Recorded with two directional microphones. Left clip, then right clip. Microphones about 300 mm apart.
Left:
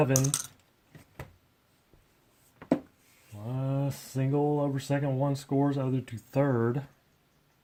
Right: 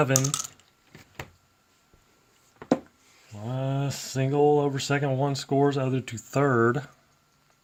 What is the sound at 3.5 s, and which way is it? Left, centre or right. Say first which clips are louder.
Speech: right 3 dB; right.